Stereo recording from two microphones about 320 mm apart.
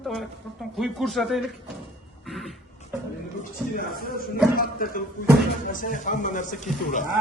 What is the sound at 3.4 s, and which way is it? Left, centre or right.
A man's voice, left.